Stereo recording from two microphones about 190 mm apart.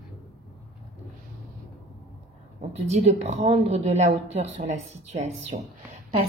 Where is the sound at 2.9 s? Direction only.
35° right (ahead or behind).